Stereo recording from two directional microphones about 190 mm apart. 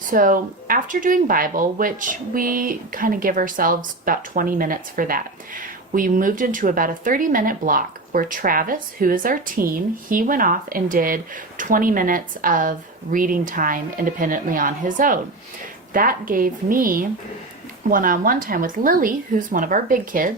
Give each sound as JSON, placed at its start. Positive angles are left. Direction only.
{"t": 0.1, "sound": "speech", "side_deg": -45}